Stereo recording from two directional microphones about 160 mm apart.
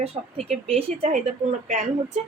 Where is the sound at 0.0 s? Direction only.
40° right (ahead or behind).